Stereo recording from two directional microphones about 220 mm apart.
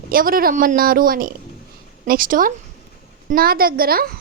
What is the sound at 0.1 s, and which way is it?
A woman's voice, 40° right (ahead or behind).